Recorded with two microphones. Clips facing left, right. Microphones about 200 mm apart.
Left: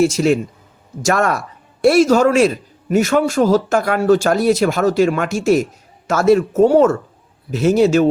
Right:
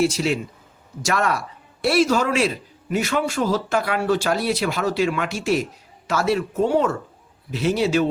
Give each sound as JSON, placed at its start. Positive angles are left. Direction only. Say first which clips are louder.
{"t": 0.0, "sound": "speech", "louder": "left 6 dB", "side_deg": 45}